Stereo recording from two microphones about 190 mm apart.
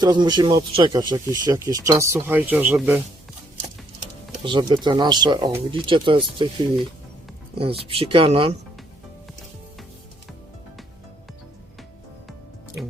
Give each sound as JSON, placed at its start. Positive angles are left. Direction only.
{"t": 0.0, "sound": "speech", "side_deg": -20}
{"t": 4.4, "sound": "speech", "side_deg": -25}
{"t": 7.6, "sound": "speech", "side_deg": -30}